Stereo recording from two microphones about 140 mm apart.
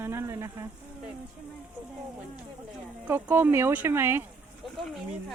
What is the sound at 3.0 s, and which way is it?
Speech, 15° right (ahead or behind).